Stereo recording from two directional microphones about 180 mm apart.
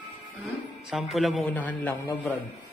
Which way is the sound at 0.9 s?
Centre (ahead or behind).